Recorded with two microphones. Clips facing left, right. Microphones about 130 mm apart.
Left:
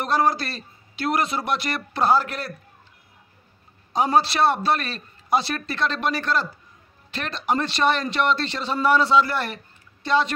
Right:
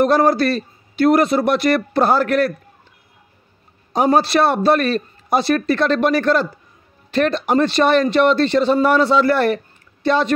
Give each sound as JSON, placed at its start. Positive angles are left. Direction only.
{"t": 0.0, "sound": "a man's voice", "side_deg": -55}
{"t": 3.9, "sound": "speech", "side_deg": -55}